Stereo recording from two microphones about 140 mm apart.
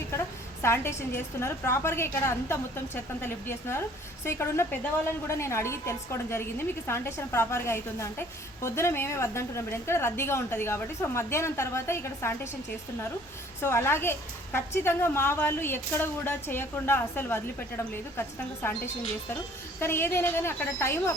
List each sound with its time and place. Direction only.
0.6 s a woman's voice: 20° left (ahead or behind)
13.6 s a woman's voice: 20° left (ahead or behind)
18.6 s a woman's voice: 15° left (ahead or behind)
19.8 s a woman's voice: 15° left (ahead or behind)